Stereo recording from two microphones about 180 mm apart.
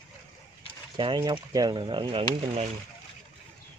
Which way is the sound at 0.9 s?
25° right (ahead or behind).